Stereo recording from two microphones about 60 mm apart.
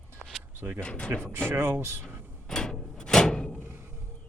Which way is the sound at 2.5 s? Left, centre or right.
Centre.